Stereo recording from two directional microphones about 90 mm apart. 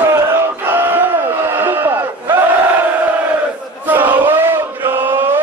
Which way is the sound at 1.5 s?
25° right (ahead or behind).